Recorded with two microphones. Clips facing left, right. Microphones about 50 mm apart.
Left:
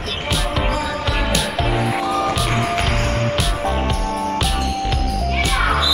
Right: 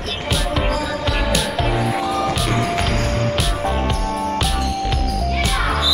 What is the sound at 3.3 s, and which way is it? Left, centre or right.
Music, centre.